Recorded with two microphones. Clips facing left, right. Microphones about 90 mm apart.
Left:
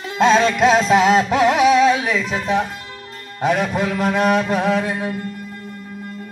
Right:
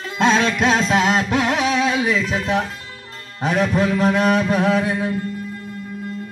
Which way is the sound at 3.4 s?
5° left (ahead or behind).